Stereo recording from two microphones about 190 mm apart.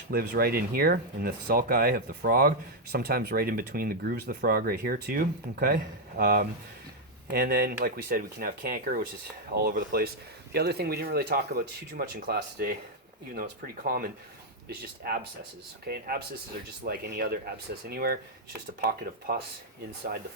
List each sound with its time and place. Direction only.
0.1 s speech: 50° right (ahead or behind)